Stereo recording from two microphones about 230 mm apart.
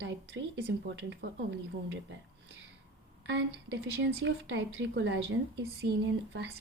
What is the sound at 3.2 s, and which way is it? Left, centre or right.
A woman's voice, right.